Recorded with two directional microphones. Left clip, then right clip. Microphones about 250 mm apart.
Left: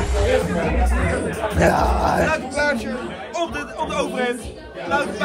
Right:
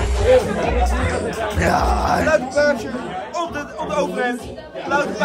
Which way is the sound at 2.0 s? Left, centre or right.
Centre.